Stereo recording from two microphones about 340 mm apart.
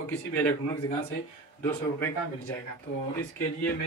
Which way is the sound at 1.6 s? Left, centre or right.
Centre.